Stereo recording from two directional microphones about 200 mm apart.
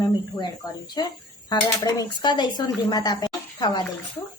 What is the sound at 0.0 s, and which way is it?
Speech, 20° left (ahead or behind).